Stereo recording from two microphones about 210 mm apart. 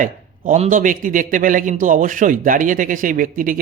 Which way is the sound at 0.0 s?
35° right (ahead or behind).